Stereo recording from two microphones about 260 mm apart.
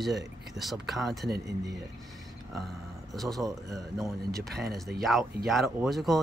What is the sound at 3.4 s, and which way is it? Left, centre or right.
Speech, centre.